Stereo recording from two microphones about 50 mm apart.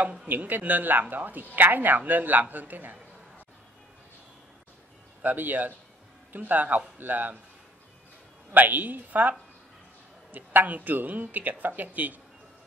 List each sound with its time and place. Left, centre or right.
0.3 s speech: right
5.2 s speech: right
8.5 s speech: right
10.3 s speech: right